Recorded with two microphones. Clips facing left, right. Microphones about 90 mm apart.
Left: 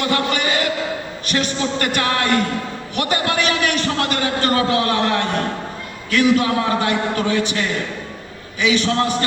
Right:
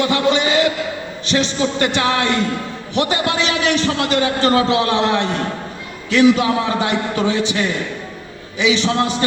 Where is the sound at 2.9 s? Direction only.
25° right (ahead or behind).